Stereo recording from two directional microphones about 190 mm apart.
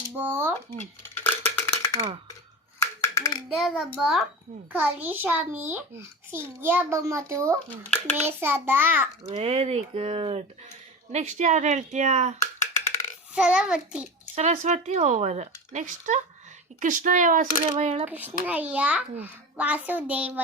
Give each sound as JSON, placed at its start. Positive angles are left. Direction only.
{"t": 0.2, "sound": "a child's voice", "side_deg": -10}
{"t": 1.0, "sound": "a sound", "side_deg": 10}
{"t": 3.2, "sound": "hands", "side_deg": 20}
{"t": 3.5, "sound": "a child's voice", "side_deg": 0}
{"t": 9.2, "sound": "speech", "side_deg": -35}
{"t": 12.5, "sound": "a sound", "side_deg": 40}
{"t": 13.3, "sound": "a child's voice", "side_deg": -5}
{"t": 14.3, "sound": "speech", "side_deg": -35}
{"t": 18.0, "sound": "a child's voice", "side_deg": -10}